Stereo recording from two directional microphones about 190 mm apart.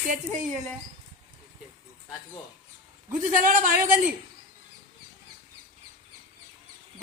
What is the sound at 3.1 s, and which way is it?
Speech, 45° right (ahead or behind).